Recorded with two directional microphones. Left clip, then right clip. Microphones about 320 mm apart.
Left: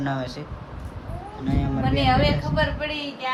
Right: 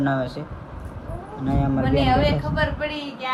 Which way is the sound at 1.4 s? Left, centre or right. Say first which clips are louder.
Right 3 dB; centre.